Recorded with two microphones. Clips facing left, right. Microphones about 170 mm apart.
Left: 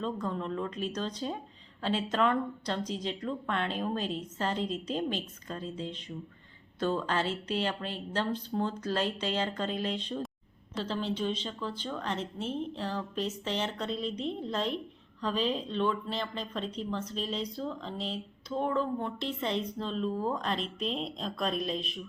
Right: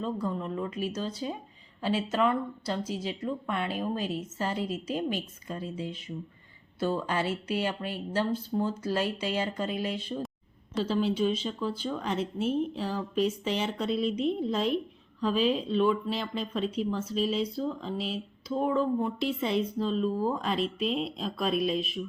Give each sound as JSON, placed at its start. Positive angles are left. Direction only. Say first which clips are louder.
{"t": 0.0, "sound": "speech", "louder": "right 2 dB", "side_deg": -10}